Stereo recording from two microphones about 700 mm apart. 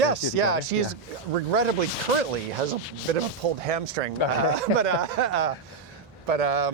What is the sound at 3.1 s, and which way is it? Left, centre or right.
Speech, right.